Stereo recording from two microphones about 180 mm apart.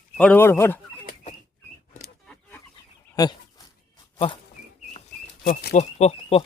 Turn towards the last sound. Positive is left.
turn(degrees=35)  # may be behind; listen again after turning